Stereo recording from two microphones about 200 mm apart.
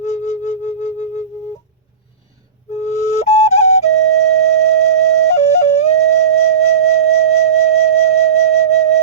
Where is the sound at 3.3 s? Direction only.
30° left (ahead or behind).